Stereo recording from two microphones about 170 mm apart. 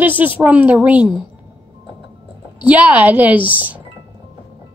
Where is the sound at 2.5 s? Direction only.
10° right (ahead or behind).